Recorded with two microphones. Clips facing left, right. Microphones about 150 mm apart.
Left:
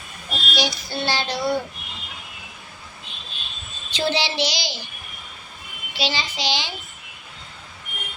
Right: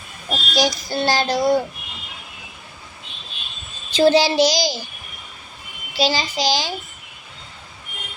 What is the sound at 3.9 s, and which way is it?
Child singing, 40° right (ahead or behind).